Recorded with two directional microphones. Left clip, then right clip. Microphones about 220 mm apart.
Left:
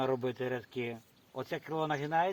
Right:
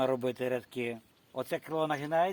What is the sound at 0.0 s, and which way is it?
Speech, 55° right (ahead or behind).